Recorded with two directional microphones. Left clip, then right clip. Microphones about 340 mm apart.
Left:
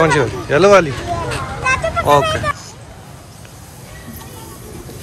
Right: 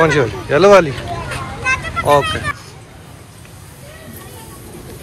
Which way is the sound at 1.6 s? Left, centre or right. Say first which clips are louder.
Left 1 dB; centre.